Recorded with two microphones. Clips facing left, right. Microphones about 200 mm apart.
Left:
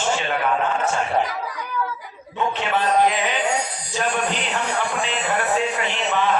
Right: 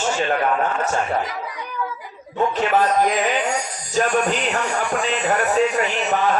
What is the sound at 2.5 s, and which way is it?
A man's voice, 40° right (ahead or behind).